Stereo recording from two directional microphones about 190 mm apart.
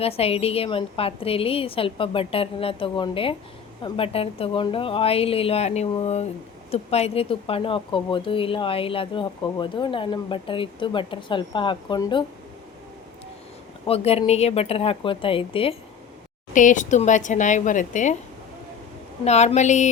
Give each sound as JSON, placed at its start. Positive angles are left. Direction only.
{"t": 0.0, "sound": "a woman's voice", "side_deg": 30}
{"t": 13.8, "sound": "a woman's voice", "side_deg": 30}
{"t": 16.5, "sound": "a woman's voice", "side_deg": 40}
{"t": 19.2, "sound": "a woman's voice", "side_deg": 35}